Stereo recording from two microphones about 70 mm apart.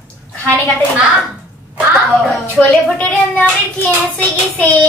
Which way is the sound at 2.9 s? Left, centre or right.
Centre.